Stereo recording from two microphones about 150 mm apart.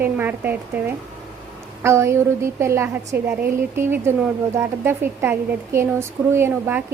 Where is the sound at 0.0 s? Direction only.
15° right (ahead or behind).